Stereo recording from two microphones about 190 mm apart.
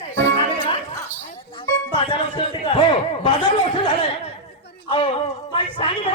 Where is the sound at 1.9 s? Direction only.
25° left (ahead or behind).